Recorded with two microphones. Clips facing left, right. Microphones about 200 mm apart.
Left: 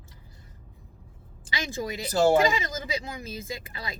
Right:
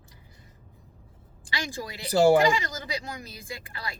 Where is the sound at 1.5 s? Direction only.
25° left (ahead or behind).